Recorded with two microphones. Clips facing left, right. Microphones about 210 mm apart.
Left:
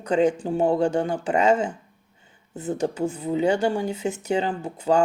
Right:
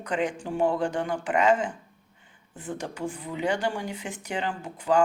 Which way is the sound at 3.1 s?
25° left (ahead or behind).